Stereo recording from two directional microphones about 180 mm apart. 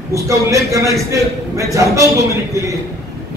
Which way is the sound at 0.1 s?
15° right (ahead or behind).